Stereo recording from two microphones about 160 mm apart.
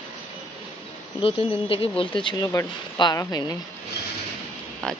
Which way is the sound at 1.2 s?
35° left (ahead or behind).